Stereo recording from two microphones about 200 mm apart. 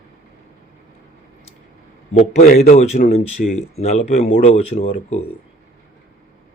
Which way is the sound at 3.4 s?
50° left (ahead or behind).